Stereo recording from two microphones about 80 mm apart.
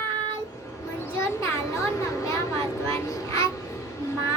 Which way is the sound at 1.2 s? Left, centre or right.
Left.